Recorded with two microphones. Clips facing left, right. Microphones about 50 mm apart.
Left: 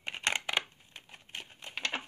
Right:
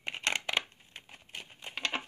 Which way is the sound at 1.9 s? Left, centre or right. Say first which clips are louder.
Right 1 dB; centre.